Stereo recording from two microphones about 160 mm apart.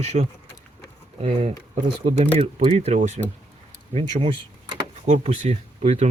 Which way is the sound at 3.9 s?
35° right (ahead or behind).